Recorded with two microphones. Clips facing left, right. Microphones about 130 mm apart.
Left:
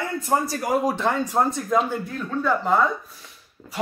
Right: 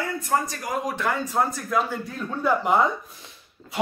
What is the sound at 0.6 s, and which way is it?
Speech, 35° left (ahead or behind).